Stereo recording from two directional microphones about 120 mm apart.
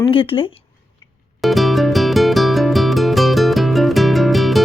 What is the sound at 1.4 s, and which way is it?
Music, centre (ahead or behind).